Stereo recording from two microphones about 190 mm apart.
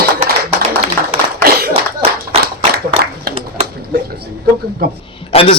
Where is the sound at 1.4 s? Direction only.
55° right (ahead or behind).